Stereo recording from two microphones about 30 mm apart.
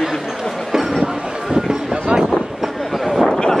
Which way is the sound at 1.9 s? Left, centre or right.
Right.